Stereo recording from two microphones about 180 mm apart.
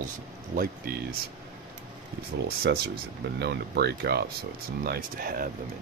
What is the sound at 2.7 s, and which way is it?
Speech, 75° right (ahead or behind).